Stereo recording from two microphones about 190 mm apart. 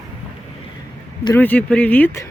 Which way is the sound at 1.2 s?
10° left (ahead or behind).